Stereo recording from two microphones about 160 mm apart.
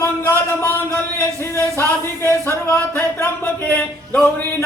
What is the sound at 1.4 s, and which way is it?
Speech, 15° left (ahead or behind).